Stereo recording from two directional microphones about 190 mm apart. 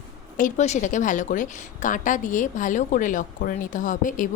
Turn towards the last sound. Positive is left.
turn(degrees=45)  # may be behind; listen again after turning